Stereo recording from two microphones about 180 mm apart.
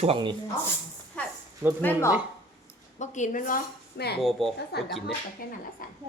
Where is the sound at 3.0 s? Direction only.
40° left (ahead or behind); by 4.2 s 65° left (ahead or behind).